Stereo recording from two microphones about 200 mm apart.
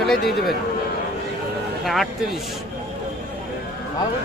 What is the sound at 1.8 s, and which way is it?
Speech, centre (ahead or behind).